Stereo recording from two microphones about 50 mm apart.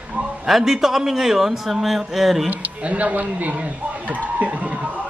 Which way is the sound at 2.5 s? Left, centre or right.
Right.